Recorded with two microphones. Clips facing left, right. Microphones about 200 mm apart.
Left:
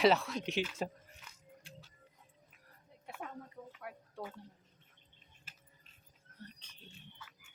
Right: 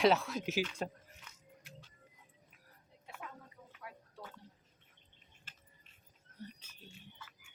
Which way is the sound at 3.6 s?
55° left (ahead or behind).